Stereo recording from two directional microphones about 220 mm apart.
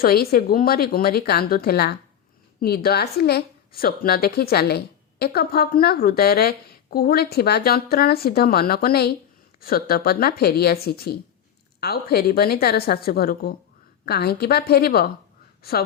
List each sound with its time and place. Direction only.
0.0 s a woman's voice: 45° left (ahead or behind)